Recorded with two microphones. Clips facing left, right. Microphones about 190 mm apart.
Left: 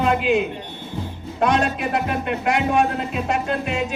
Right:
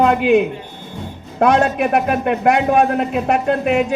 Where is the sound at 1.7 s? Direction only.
60° right (ahead or behind).